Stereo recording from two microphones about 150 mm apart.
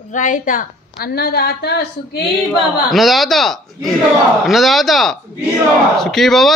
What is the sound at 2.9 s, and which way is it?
A man's voice, centre (ahead or behind).